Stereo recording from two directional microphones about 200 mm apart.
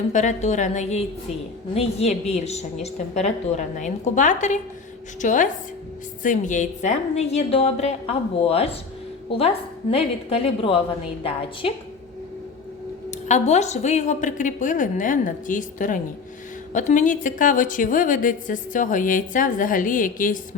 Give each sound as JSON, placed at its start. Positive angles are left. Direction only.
{"t": 0.1, "sound": "a woman's voice", "side_deg": 35}
{"t": 13.1, "sound": "a woman's voice", "side_deg": 35}